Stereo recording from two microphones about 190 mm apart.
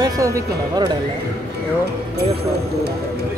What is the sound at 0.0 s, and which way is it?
Speech, 20° right (ahead or behind).